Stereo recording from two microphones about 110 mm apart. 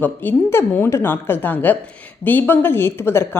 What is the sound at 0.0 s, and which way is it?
A woman's voice, 15° left (ahead or behind).